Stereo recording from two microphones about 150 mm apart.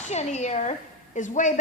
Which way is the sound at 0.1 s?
50° left (ahead or behind).